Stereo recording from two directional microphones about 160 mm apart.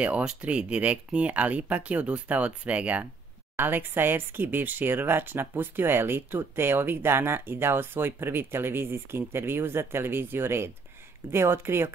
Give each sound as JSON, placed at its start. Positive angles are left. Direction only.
{"t": 0.0, "sound": "speech", "side_deg": -5}